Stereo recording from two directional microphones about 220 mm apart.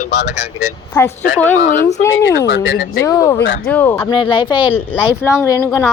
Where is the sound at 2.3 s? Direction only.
55° left (ahead or behind).